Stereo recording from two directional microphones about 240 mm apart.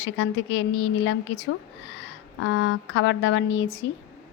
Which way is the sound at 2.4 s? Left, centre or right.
Left.